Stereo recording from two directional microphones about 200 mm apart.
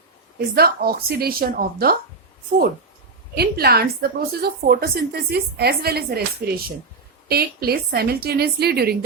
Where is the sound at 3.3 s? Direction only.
50° right (ahead or behind).